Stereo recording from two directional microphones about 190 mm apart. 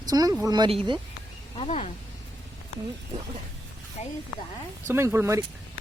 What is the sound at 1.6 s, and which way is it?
Speech, 35° left (ahead or behind).